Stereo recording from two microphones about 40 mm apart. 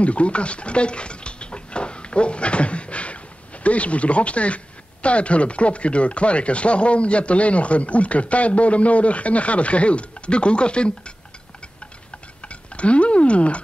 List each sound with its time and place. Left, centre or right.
0.0 s a sound: left
3.6 s speech: left
12.4 s speech: left